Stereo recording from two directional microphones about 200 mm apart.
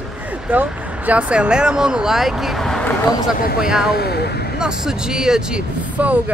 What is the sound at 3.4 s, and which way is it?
Speech, 45° left (ahead or behind).